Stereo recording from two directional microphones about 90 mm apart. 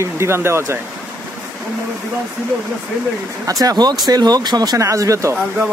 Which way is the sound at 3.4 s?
45° right (ahead or behind).